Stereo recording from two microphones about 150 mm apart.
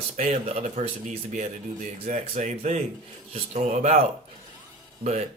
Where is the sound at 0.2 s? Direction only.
45° right (ahead or behind).